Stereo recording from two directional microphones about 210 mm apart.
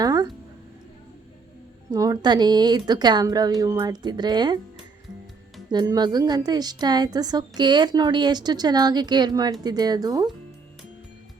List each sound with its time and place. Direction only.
0.0 s a sound: 20° right (ahead or behind)
1.9 s a woman's voice: 20° right (ahead or behind)
5.7 s a woman's voice: 20° right (ahead or behind)